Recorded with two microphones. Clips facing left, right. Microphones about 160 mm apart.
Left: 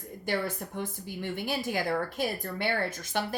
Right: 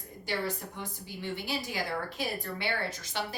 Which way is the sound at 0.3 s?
50° left (ahead or behind).